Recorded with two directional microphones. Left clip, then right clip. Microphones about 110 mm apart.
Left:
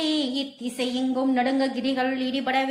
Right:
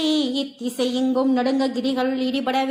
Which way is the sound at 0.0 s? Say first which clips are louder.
Right 4 dB; 15° right (ahead or behind).